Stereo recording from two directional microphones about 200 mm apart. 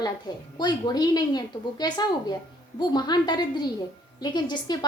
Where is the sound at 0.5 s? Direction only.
20° left (ahead or behind).